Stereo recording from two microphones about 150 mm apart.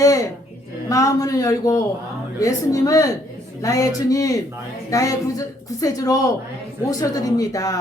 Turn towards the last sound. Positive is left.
turn(degrees=25)  # may be behind; listen again after turning